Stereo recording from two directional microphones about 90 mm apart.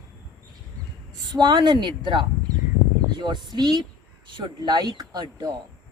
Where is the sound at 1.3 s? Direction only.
55° right (ahead or behind).